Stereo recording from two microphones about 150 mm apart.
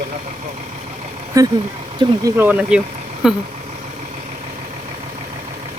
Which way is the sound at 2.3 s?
10° right (ahead or behind).